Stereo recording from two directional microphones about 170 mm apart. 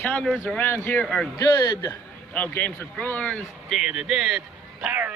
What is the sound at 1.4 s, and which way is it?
Speech, 20° left (ahead or behind).